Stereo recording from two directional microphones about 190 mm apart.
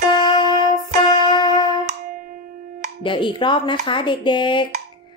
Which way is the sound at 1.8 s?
45° right (ahead or behind).